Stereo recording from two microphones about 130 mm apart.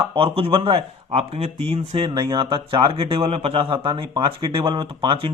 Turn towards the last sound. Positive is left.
turn(degrees=-40)  # may be behind; listen again after turning